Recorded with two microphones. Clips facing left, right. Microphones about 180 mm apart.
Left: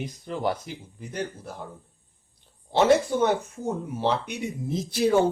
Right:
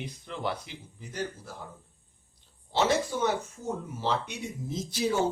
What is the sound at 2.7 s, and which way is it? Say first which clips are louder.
Speech: left 7 dB; 55° left (ahead or behind).